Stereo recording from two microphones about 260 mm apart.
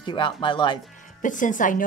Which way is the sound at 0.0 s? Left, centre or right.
Centre.